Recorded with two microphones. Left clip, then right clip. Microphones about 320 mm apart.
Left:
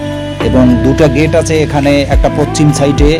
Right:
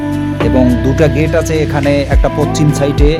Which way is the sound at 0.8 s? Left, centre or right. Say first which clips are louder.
Left 3 dB; right.